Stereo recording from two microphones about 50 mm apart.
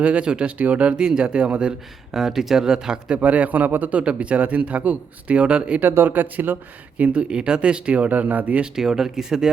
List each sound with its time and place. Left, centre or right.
0.0 s a man's voice: right
2.1 s speech: centre
3.2 s a man's voice: right
6.1 s a man's voice: right
7.0 s a man's voice: right
8.6 s speech: centre